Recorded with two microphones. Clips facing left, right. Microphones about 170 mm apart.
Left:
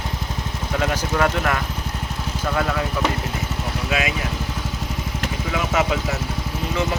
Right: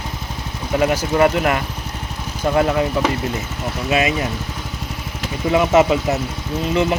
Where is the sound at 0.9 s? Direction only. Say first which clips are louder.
Right 5 dB; 15° right (ahead or behind).